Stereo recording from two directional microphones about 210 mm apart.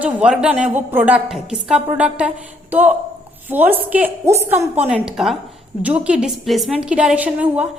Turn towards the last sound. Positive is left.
turn(degrees=-5)  # may be behind; listen again after turning